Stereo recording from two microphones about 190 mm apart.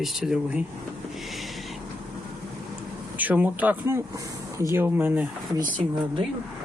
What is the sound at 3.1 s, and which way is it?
Speech, 10° right (ahead or behind).